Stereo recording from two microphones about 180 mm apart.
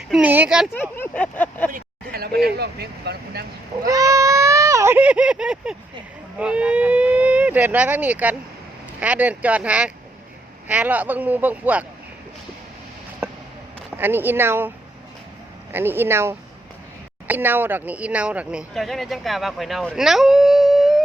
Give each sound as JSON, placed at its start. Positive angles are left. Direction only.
{"t": 0.1, "sound": "speech", "side_deg": -10}
{"t": 0.7, "sound": "a sound", "side_deg": 10}
{"t": 1.7, "sound": "speech", "side_deg": -60}
{"t": 3.8, "sound": "baby cry", "side_deg": -20}
{"t": 6.4, "sound": "speech", "side_deg": -5}
{"t": 13.9, "sound": "speech", "side_deg": -10}
{"t": 15.7, "sound": "speech", "side_deg": -10}